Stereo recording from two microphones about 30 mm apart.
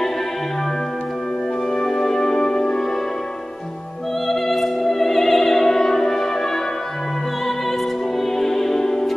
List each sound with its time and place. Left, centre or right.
1.8 s music: centre
4.3 s music: centre
8.4 s music: centre